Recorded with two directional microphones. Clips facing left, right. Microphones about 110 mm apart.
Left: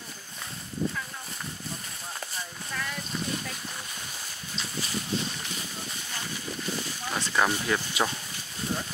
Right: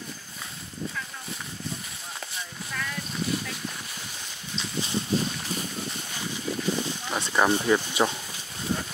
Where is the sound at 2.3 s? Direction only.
5° left (ahead or behind).